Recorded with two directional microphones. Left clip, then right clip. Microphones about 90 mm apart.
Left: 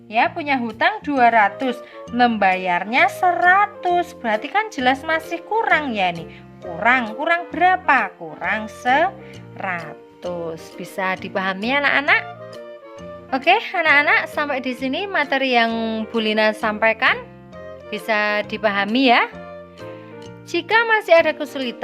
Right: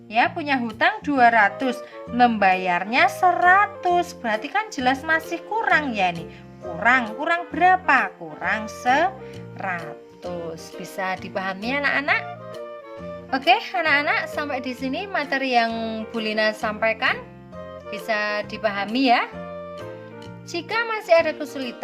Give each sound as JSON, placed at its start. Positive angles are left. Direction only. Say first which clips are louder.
{"t": 0.1, "sound": "speech", "louder": "left 2 dB", "side_deg": 25}
{"t": 4.3, "sound": "speech", "louder": "left 4 dB", "side_deg": 40}
{"t": 10.4, "sound": "a woman's voice", "louder": "left 3 dB", "side_deg": 45}
{"t": 13.3, "sound": "a woman's voice", "louder": "left 2 dB", "side_deg": 45}
{"t": 20.5, "sound": "speech", "louder": "left 8 dB", "side_deg": 65}